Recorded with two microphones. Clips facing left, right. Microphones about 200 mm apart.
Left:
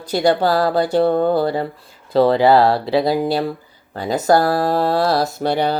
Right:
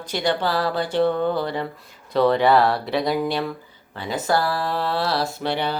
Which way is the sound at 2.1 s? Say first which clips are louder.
Left 4 dB; 30° left (ahead or behind).